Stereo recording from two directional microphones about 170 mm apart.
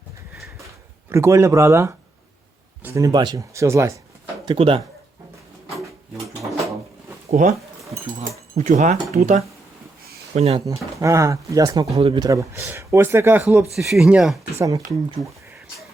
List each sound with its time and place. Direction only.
1.1 s speech: 15° right (ahead or behind)
4.4 s speech: 30° right (ahead or behind)
7.3 s speech: 45° right (ahead or behind)
8.5 s speech: 45° right (ahead or behind)
10.7 s speech: 20° right (ahead or behind)
13.7 s speech: centre (ahead or behind)